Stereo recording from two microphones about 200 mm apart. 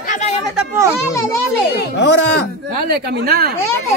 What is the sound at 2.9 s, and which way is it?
Speech, 50° right (ahead or behind).